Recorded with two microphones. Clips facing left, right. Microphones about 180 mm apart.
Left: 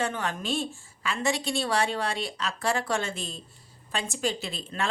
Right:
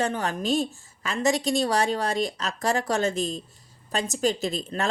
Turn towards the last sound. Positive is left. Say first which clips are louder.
# right 5 dB
turn(degrees=-40)  # may be behind; listen again after turning